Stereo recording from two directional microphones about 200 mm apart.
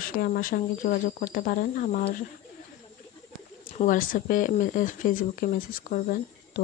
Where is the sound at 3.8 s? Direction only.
40° left (ahead or behind).